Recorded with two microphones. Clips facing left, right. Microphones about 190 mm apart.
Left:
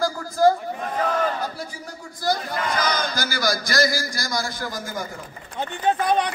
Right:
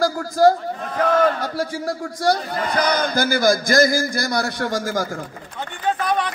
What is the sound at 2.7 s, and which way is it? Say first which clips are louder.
A man's voice: right 6 dB; 60° right (ahead or behind).